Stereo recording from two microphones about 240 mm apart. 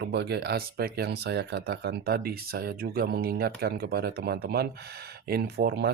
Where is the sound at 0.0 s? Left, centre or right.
Right.